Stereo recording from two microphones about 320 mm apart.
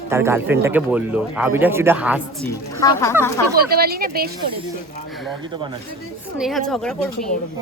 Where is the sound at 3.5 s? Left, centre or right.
Right.